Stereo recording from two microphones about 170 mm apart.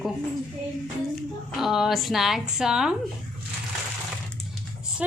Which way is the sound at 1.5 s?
Centre (ahead or behind).